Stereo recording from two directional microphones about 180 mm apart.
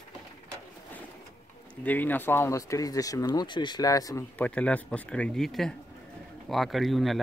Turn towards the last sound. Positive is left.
turn(degrees=0)  # may be behind; listen again after turning